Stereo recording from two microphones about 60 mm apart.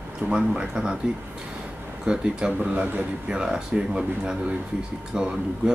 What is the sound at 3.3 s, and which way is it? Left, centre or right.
Speech, centre.